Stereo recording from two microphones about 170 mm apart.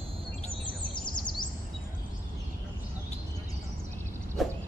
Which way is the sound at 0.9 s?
25° left (ahead or behind).